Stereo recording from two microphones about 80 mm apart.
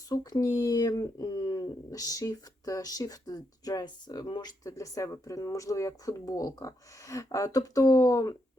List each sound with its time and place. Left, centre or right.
0.1 s speech: left
1.9 s speech: left
4.7 s speech: left